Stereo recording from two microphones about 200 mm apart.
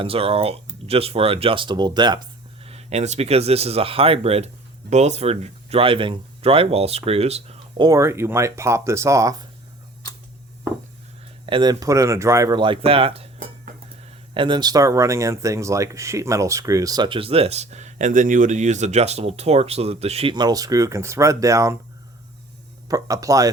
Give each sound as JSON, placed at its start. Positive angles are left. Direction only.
{"t": 0.0, "sound": "speech", "side_deg": -30}
{"t": 2.6, "sound": "speech", "side_deg": -30}
{"t": 7.9, "sound": "speech", "side_deg": -15}
{"t": 11.4, "sound": "speech", "side_deg": -25}
{"t": 14.3, "sound": "speech", "side_deg": -25}
{"t": 22.9, "sound": "speech", "side_deg": -15}